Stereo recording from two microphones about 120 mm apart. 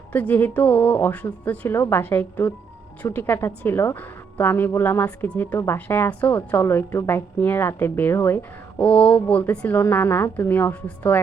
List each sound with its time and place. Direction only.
0.1 s a woman's voice: 15° left (ahead or behind)